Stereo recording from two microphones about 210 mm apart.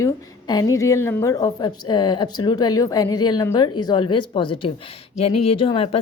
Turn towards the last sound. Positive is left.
turn(degrees=25)  # may be behind; listen again after turning